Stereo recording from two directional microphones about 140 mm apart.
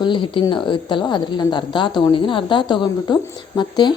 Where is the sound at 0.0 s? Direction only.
35° left (ahead or behind).